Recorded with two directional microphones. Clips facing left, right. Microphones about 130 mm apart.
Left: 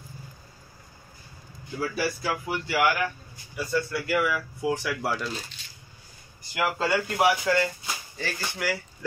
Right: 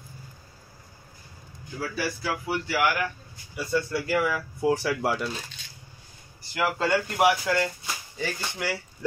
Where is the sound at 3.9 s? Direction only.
30° right (ahead or behind).